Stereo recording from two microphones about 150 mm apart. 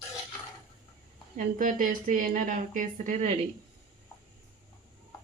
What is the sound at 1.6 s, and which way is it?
A woman's voice, 65° right (ahead or behind).